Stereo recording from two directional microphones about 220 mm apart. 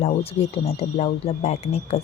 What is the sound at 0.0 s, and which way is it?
Speech, 30° left (ahead or behind).